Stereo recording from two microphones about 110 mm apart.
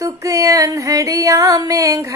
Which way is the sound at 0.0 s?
30° right (ahead or behind).